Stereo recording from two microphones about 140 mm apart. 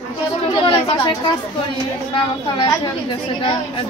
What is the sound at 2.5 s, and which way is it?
Speech, 35° left (ahead or behind).